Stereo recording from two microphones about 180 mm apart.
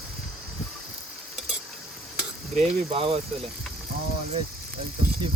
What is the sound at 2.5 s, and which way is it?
Speech, 40° right (ahead or behind).